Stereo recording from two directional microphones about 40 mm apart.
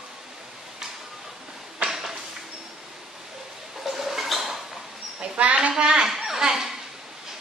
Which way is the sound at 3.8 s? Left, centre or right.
Centre.